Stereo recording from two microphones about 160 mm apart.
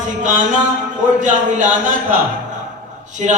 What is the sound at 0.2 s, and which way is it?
Speech, 50° right (ahead or behind).